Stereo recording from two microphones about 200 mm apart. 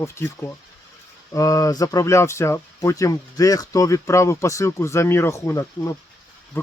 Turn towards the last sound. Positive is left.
turn(degrees=10)  # may be behind; listen again after turning